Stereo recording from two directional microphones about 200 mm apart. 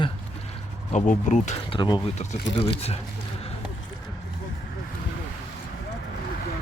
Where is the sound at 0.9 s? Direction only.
35° left (ahead or behind).